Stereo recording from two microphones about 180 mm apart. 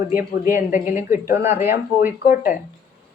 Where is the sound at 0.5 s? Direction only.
45° left (ahead or behind).